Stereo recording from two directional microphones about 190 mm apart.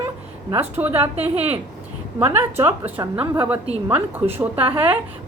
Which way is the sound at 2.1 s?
10° right (ahead or behind).